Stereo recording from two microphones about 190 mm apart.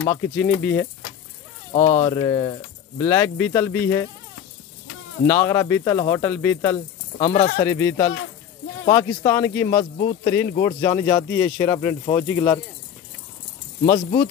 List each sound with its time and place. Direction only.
0.0 s speech: 10° left (ahead or behind)
1.9 s speech: 20° left (ahead or behind)
5.2 s speech: 10° left (ahead or behind)
9.9 s speech: 50° left (ahead or behind)
10.6 s speech: 20° left (ahead or behind)
13.8 s speech: 45° left (ahead or behind)